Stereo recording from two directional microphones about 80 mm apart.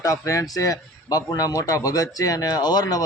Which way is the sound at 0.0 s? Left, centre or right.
Left.